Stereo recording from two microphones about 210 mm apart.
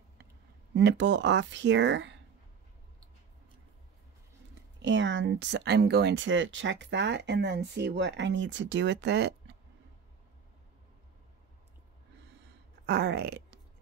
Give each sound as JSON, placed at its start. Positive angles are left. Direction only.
{"t": 0.7, "sound": "speech", "side_deg": -60}
{"t": 4.8, "sound": "speech", "side_deg": -60}
{"t": 12.8, "sound": "speech", "side_deg": -50}